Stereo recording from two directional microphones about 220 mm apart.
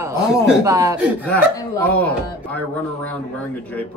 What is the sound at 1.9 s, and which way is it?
Speech, 5° left (ahead or behind).